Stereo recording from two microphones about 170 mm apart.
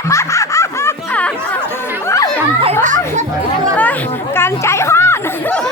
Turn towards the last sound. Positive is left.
turn(degrees=15)  # may be behind; listen again after turning